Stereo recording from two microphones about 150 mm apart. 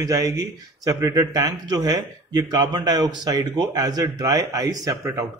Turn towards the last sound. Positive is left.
turn(degrees=-20)  # may be behind; listen again after turning